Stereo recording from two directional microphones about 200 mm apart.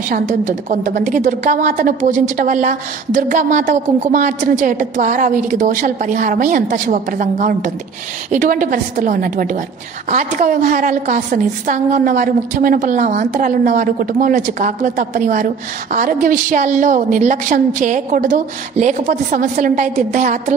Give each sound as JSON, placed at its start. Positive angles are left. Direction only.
{"t": 0.1, "sound": "a woman's voice", "side_deg": -40}